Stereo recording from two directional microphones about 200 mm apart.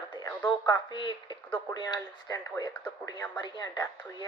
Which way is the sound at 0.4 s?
25° left (ahead or behind).